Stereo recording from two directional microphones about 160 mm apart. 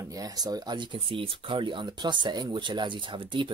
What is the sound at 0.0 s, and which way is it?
Speech, 20° right (ahead or behind).